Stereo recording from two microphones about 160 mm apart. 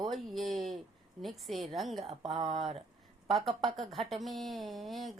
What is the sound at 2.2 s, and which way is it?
Speech, 40° right (ahead or behind).